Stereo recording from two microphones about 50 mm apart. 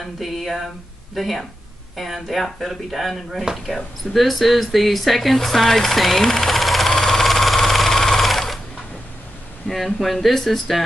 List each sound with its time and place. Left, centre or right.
0.0 s speech: centre
6.9 s sewing machine: centre
9.7 s speech: centre